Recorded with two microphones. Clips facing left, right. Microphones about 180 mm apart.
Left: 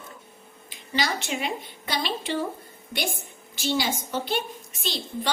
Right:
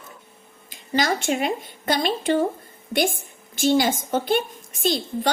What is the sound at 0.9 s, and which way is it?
A woman's voice, 45° right (ahead or behind).